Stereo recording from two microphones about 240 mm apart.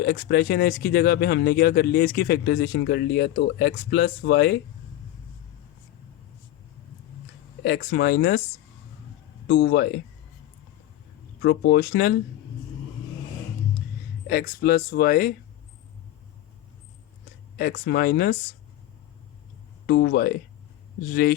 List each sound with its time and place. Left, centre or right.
0.0 s speech: left
7.6 s speech: left
9.5 s speech: left
11.4 s speech: left
14.3 s speech: left
17.6 s speech: left
19.9 s speech: left